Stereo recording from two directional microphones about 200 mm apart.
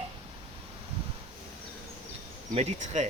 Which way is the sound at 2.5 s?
35° right (ahead or behind).